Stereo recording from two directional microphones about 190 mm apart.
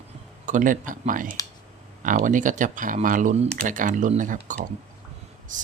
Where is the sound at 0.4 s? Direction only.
45° right (ahead or behind).